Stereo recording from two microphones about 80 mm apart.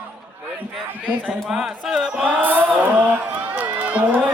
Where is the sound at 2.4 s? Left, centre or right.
Right.